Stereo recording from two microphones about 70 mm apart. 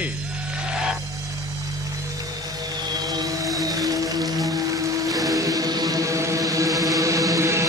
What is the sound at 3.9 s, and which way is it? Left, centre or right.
Music, right.